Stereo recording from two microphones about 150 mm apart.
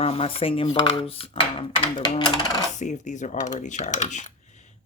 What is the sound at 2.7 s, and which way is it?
Speech, 55° left (ahead or behind).